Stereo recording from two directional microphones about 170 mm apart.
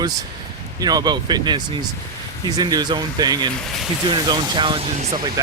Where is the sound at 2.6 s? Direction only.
25° right (ahead or behind).